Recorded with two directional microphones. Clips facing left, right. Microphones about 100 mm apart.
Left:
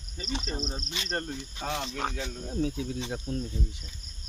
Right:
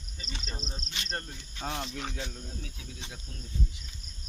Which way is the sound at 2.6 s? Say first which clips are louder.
Left 14 dB; 40° left (ahead or behind).